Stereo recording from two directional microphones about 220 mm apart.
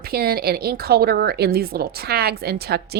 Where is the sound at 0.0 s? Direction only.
45° right (ahead or behind).